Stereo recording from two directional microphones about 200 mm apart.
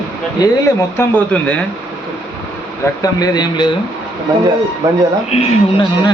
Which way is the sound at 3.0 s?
20° left (ahead or behind).